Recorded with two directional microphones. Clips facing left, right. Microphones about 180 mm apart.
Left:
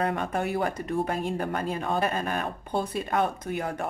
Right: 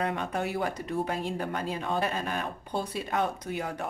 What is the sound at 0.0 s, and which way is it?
Speech, 50° left (ahead or behind).